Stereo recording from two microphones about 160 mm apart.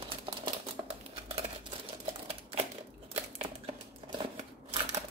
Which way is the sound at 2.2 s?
35° right (ahead or behind).